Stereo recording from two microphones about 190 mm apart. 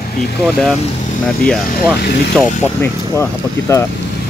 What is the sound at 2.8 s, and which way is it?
Speech, 15° left (ahead or behind).